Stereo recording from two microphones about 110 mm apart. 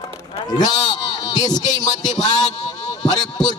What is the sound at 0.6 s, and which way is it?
Speech, 35° left (ahead or behind).